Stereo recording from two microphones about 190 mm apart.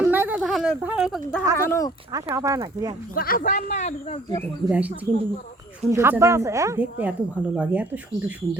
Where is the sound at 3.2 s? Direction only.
50° left (ahead or behind).